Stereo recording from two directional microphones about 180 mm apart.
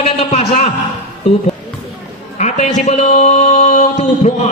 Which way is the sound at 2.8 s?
40° left (ahead or behind).